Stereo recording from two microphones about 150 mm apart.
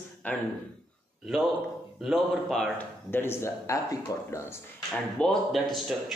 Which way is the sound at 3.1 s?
15° left (ahead or behind).